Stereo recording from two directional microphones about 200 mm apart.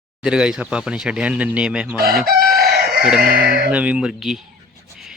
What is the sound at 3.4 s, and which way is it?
Speech, 50° right (ahead or behind).